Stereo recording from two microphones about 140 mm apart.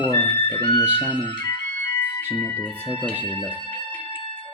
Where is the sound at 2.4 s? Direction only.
15° left (ahead or behind).